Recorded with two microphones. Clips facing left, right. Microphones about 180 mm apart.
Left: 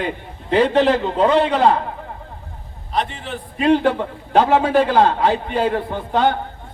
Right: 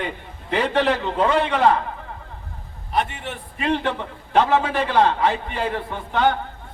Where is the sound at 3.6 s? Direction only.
35° left (ahead or behind).